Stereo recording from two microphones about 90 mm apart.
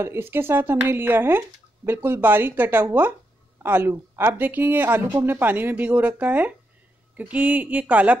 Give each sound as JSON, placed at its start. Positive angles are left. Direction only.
{"t": 0.0, "sound": "speech", "side_deg": -25}